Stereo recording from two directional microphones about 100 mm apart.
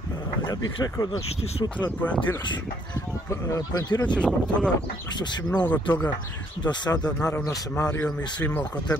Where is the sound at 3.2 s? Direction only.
35° left (ahead or behind).